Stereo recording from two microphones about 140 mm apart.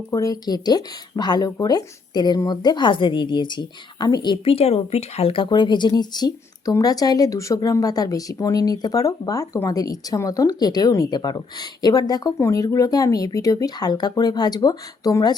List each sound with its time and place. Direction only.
0.1 s speech: 25° left (ahead or behind)